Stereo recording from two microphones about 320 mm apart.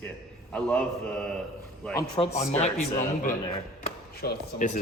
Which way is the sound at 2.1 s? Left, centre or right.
Centre.